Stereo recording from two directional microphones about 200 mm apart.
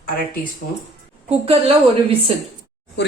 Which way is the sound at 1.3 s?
30° right (ahead or behind).